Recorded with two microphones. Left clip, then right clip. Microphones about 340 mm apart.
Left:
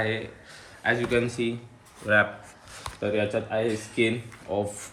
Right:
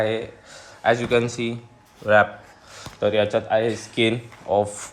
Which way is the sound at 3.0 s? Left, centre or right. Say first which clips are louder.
Right 7 dB; centre.